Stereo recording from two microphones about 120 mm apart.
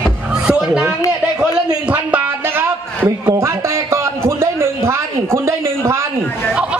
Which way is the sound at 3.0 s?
25° right (ahead or behind).